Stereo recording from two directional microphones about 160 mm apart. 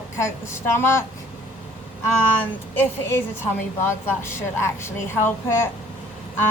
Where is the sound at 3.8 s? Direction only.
15° left (ahead or behind).